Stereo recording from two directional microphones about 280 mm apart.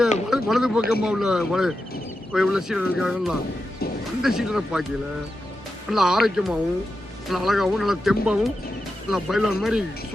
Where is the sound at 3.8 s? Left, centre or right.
Left.